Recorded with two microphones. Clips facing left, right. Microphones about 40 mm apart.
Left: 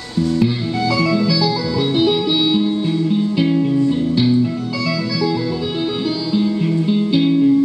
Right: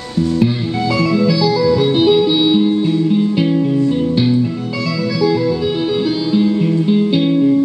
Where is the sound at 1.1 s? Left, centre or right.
Centre.